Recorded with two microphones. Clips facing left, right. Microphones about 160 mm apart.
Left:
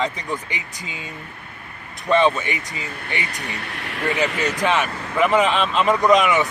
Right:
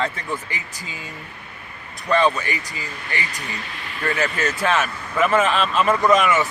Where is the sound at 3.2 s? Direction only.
70° left (ahead or behind).